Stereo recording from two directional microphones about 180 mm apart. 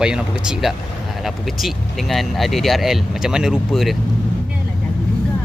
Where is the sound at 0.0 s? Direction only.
5° right (ahead or behind).